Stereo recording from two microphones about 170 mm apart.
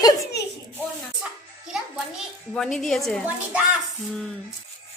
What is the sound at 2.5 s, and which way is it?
Speech, 5° left (ahead or behind).